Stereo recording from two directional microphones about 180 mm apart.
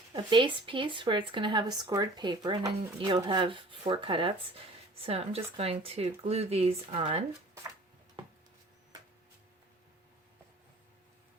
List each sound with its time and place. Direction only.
0.1 s speech: 25° right (ahead or behind)